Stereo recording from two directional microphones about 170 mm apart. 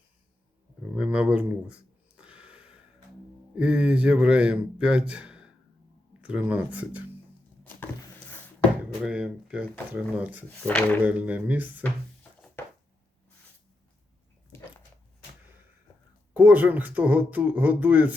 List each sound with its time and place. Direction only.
0.8 s a sound: 5° right (ahead or behind)
3.5 s a man's voice: 5° right (ahead or behind)
9.0 s a man's voice: 5° right (ahead or behind)
10.4 s speech: 10° left (ahead or behind)
11.0 s a man's voice: 10° right (ahead or behind)
12.6 s a sound: 10° left (ahead or behind)
14.5 s dog: 15° left (ahead or behind)
16.3 s a man's voice: 10° right (ahead or behind)